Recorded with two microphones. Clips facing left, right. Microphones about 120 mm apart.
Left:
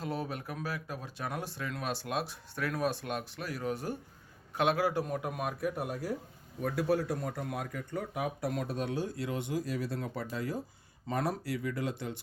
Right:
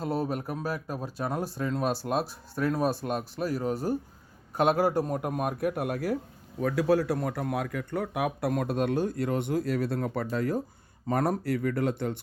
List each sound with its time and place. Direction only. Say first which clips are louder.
0.0 s a man's voice: right 7 dB; 40° right (ahead or behind); by 6.1 s 70° right (ahead or behind)
6.6 s speech: right 6 dB; 90° right; by 12.2 s 55° right (ahead or behind)